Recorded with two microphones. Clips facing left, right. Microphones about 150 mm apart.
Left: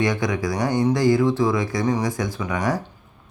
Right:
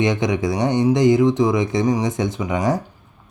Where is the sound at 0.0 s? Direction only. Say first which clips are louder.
Right 3 dB; 20° right (ahead or behind).